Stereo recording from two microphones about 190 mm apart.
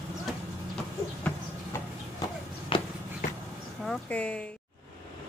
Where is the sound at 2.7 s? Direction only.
25° left (ahead or behind).